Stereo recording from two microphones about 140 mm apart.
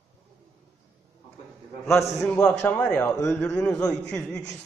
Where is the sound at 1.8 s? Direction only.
20° left (ahead or behind).